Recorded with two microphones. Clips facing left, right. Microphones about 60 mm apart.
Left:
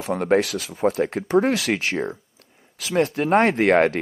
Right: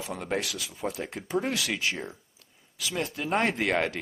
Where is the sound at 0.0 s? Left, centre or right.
Left.